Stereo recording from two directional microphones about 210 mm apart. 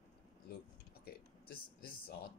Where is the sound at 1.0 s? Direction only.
45° left (ahead or behind).